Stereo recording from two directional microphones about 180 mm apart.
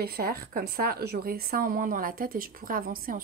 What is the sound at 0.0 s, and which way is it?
A woman's voice, 55° right (ahead or behind).